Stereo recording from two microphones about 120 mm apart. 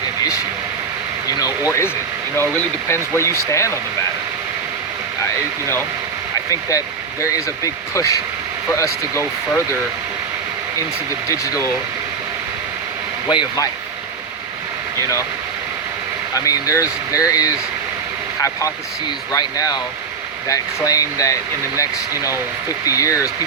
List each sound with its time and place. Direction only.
1.4 s speech: 30° left (ahead or behind)
6.5 s speech: 25° left (ahead or behind)
11.3 s speech: 25° left (ahead or behind)
13.2 s speech: 35° left (ahead or behind)
16.3 s speech: 30° left (ahead or behind)
19.3 s speech: 30° left (ahead or behind)